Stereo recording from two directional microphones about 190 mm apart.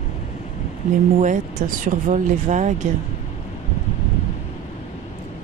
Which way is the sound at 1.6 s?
40° right (ahead or behind).